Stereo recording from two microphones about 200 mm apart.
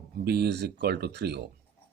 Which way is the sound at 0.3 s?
55° right (ahead or behind).